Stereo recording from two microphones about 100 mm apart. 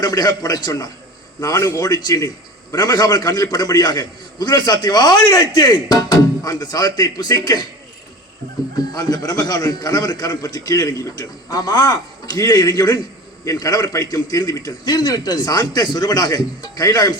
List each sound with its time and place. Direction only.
0.0 s a man's voice: 40° left (ahead or behind)
8.9 s a man's voice: 40° left (ahead or behind)